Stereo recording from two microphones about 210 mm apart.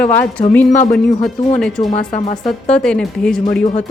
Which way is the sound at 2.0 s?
30° left (ahead or behind).